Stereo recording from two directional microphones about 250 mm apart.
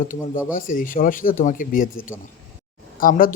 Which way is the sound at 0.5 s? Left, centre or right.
Left.